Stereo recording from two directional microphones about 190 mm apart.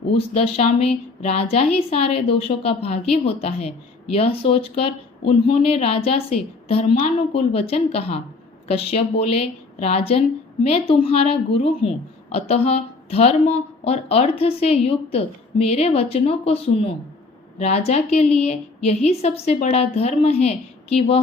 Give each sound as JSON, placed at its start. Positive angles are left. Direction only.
{"t": 0.1, "sound": "a woman's voice", "side_deg": 30}